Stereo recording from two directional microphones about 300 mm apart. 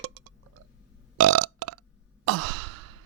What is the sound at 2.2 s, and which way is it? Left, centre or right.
Sigh, right.